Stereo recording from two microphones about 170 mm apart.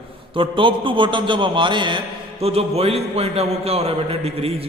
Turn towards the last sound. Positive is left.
turn(degrees=-35)  # may be behind; listen again after turning